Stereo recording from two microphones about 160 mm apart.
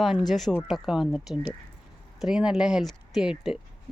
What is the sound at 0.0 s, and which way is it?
Speech, centre (ahead or behind).